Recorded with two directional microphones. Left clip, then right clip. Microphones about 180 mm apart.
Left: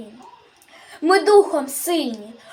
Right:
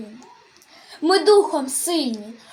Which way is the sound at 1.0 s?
Centre (ahead or behind).